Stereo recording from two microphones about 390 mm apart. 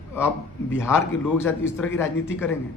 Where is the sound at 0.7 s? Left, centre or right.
Centre.